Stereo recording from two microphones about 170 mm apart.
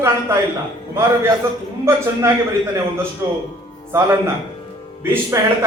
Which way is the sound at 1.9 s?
15° right (ahead or behind).